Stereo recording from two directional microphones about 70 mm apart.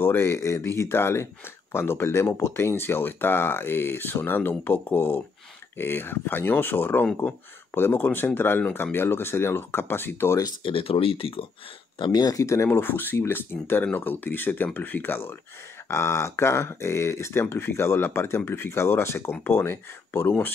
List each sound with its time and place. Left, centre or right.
0.0 s speech: left
12.1 s speech: left
12.4 s speech: left
15.9 s speech: left